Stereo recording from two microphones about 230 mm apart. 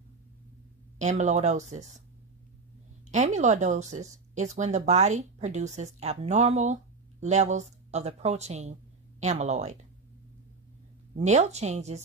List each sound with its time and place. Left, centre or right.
0.9 s speech: right
3.1 s speech: right
11.1 s speech: right